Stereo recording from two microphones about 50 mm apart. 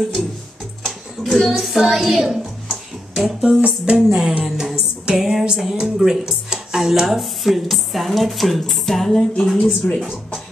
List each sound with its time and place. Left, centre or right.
0.8 s a sound: centre
1.6 s a child's voice: centre
3.4 s music: right
4.5 s a sound: centre
5.0 s speech: centre
9.6 s a woman's voice: centre